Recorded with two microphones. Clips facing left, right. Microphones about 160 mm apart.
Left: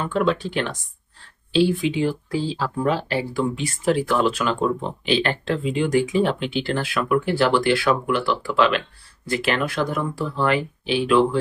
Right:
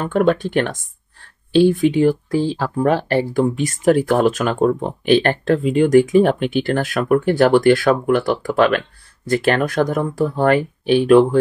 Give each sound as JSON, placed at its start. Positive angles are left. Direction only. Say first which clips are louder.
{"t": 0.0, "sound": "speech", "louder": "right 5 dB", "side_deg": -50}